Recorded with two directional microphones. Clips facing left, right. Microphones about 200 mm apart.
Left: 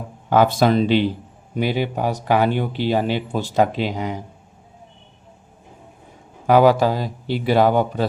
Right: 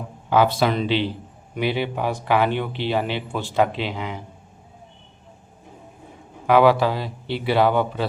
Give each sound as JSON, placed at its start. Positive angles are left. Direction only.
{"t": 0.3, "sound": "a man's voice", "side_deg": 45}
{"t": 6.5, "sound": "a man's voice", "side_deg": 40}